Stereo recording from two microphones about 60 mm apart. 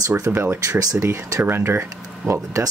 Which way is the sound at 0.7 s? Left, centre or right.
Right.